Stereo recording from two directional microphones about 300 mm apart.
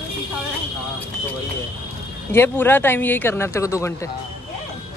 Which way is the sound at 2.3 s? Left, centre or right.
Centre.